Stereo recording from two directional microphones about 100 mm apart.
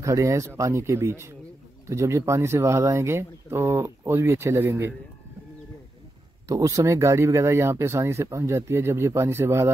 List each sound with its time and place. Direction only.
0.0 s speech: 30° right (ahead or behind)
6.4 s speech: 35° right (ahead or behind)